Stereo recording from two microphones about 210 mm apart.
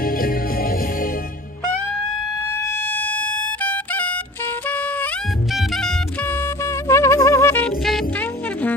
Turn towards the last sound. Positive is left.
turn(degrees=5)  # may be behind; listen again after turning